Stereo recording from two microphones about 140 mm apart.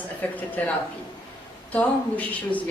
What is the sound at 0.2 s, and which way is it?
Speech, 10° left (ahead or behind).